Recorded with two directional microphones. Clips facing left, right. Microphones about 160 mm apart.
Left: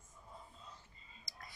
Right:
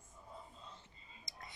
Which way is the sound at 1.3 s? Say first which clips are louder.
Right 1 dB; 20° right (ahead or behind).